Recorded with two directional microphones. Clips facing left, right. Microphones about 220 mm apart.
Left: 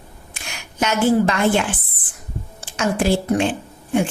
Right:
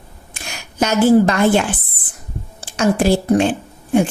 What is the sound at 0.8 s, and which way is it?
Speech, 40° right (ahead or behind).